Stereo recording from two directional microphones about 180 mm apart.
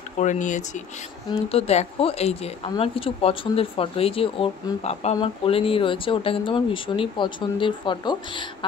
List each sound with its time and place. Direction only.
0.2 s speech: 45° left (ahead or behind); by 8.5 s 25° left (ahead or behind)